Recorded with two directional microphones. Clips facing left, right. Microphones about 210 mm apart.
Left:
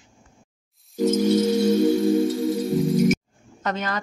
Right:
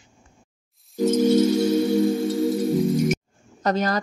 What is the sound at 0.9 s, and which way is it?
Music, centre (ahead or behind).